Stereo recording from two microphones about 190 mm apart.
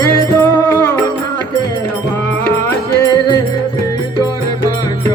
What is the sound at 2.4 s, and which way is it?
Music, 10° left (ahead or behind).